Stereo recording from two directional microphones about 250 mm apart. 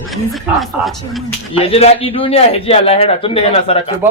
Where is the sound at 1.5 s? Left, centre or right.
Left.